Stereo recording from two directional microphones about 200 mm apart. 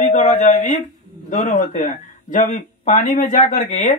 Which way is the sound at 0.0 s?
35° left (ahead or behind).